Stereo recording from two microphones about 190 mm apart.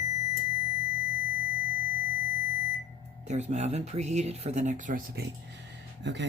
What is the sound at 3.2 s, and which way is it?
Speech, 40° right (ahead or behind).